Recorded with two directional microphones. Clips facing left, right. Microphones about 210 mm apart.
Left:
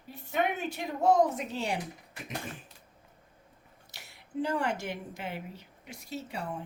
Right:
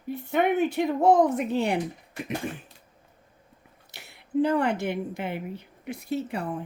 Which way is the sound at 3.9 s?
60° right (ahead or behind).